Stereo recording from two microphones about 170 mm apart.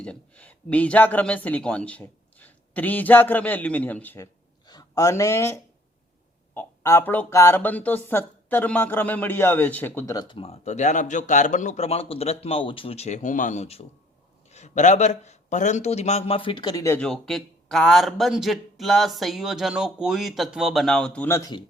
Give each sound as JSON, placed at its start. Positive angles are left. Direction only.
{"t": 0.0, "sound": "speech", "side_deg": 5}
{"t": 4.6, "sound": "speech", "side_deg": 20}
{"t": 10.2, "sound": "speech", "side_deg": 30}
{"t": 16.8, "sound": "speech", "side_deg": 15}
{"t": 17.1, "sound": "speech", "side_deg": 0}